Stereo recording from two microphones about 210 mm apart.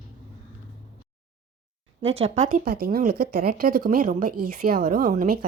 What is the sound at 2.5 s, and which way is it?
Speech, 45° right (ahead or behind).